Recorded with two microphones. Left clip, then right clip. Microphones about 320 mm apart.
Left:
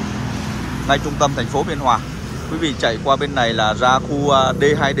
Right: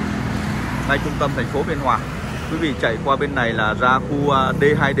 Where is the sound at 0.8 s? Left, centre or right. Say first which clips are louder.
Left 4 dB; centre.